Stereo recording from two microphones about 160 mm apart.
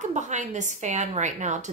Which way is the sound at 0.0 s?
50° right (ahead or behind).